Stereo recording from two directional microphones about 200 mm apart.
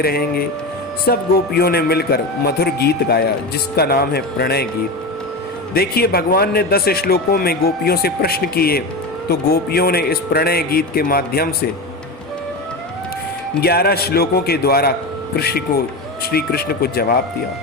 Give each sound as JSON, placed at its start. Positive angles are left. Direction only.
{"t": 0.0, "sound": "a man's voice", "side_deg": 50}
{"t": 5.7, "sound": "a man's voice", "side_deg": 50}
{"t": 13.6, "sound": "a man's voice", "side_deg": 50}